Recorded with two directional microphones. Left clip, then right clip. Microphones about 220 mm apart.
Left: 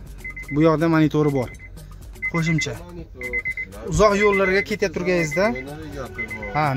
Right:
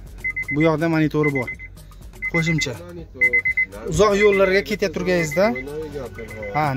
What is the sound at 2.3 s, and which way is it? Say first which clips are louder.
Speech: right 4 dB; 10° right (ahead or behind).